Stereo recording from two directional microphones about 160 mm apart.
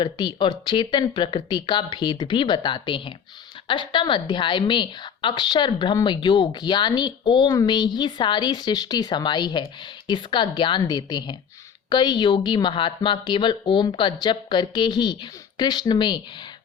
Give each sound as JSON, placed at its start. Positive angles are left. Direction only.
{"t": 0.0, "sound": "a woman's voice", "side_deg": 30}